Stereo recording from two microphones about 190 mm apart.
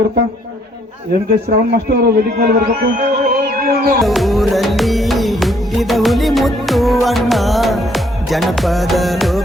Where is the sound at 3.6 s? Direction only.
50° right (ahead or behind).